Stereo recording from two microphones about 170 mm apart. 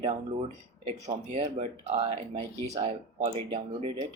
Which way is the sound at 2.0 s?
25° right (ahead or behind).